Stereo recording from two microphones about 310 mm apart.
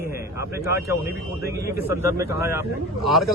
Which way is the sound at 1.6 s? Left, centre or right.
Centre.